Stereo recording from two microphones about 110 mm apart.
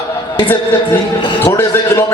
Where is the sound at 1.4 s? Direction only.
20° left (ahead or behind).